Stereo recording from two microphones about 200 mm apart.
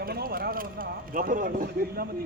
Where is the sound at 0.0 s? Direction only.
50° right (ahead or behind).